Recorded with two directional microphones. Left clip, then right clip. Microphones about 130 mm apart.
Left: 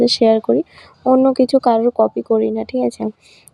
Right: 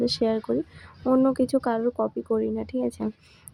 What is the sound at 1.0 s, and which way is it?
Speech, 35° left (ahead or behind).